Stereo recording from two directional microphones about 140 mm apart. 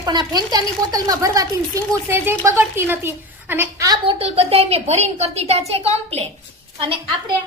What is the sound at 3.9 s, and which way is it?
A woman's voice, 40° right (ahead or behind).